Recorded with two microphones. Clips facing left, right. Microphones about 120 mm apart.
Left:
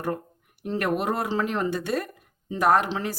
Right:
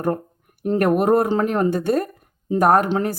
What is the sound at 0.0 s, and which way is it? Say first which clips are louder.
Speech: right 7 dB; 45° right (ahead or behind).